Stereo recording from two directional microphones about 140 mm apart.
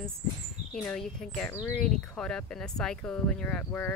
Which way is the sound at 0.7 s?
5° left (ahead or behind).